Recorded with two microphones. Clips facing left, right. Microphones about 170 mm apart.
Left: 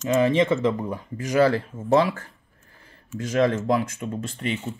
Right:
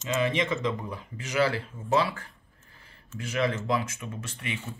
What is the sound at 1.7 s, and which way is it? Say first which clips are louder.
Speech: left 8 dB; 45° left (ahead or behind).